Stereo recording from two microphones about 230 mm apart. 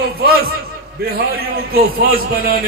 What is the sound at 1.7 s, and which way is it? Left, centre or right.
Speech, right.